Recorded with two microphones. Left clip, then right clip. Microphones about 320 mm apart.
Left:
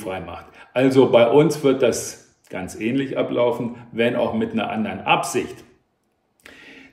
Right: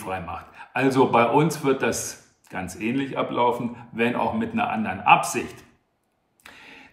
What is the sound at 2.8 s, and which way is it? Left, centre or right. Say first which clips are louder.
Speech: left 4 dB; centre.